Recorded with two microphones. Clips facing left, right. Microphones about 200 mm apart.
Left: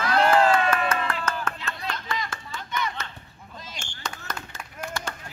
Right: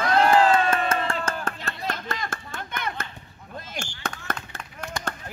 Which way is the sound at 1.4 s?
40° right (ahead or behind).